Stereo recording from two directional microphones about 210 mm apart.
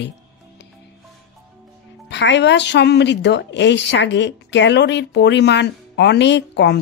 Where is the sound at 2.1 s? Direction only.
55° left (ahead or behind).